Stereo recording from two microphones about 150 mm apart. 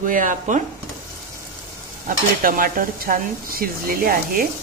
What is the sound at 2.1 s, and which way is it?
Stir, 65° right (ahead or behind).